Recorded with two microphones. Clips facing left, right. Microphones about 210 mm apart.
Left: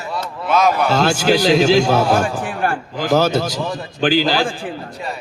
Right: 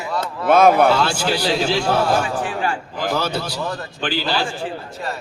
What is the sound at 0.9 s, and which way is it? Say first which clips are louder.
A man's voice: left 4 dB; 45° left (ahead or behind).